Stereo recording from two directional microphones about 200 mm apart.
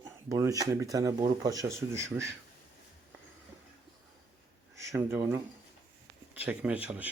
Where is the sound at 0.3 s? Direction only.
15° right (ahead or behind).